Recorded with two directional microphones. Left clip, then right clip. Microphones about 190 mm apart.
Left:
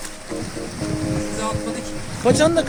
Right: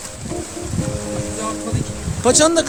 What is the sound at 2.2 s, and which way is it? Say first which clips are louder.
Speech: right 2 dB; 5° right (ahead or behind).